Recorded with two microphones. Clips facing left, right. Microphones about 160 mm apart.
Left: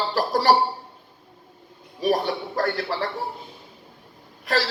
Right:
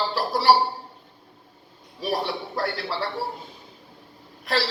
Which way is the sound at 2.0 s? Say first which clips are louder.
Left 4 dB; 45° left (ahead or behind).